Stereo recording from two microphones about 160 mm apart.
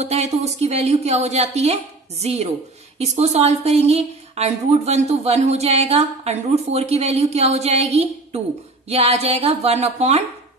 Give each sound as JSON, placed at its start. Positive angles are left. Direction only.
{"t": 0.0, "sound": "a woman's voice", "side_deg": -45}